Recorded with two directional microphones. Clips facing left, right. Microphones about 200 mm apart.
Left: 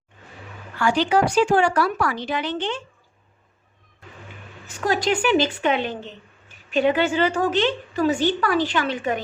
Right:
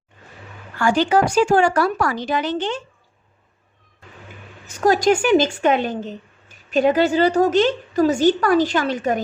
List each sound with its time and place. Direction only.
0.8 s speech: 45° right (ahead or behind)
4.6 s a woman's voice: 45° right (ahead or behind)